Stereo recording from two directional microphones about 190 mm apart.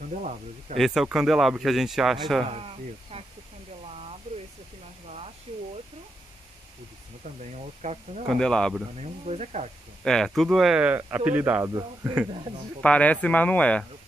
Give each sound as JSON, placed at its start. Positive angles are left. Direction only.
{"t": 0.1, "sound": "speech", "side_deg": -40}
{"t": 0.7, "sound": "speech", "side_deg": 0}
{"t": 2.5, "sound": "speech", "side_deg": -30}
{"t": 7.5, "sound": "speech", "side_deg": -35}
{"t": 8.3, "sound": "speech", "side_deg": 5}
{"t": 9.0, "sound": "speech", "side_deg": -35}
{"t": 10.0, "sound": "speech", "side_deg": 0}
{"t": 12.8, "sound": "speech", "side_deg": 5}